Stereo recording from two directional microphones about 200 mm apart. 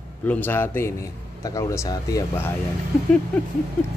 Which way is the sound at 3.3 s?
5° left (ahead or behind).